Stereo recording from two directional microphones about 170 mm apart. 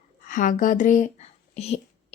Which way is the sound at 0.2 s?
50° left (ahead or behind).